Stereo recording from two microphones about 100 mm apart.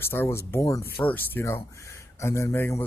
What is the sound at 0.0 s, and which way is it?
Speech, 25° left (ahead or behind).